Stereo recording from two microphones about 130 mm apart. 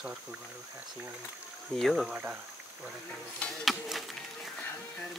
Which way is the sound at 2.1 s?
15° right (ahead or behind).